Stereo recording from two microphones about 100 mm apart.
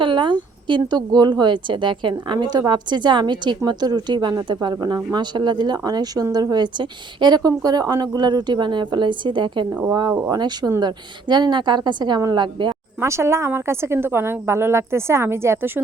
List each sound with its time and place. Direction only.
0.0 s speech: 55° right (ahead or behind)
9.9 s speech: 40° right (ahead or behind)
13.0 s a woman's voice: 30° right (ahead or behind)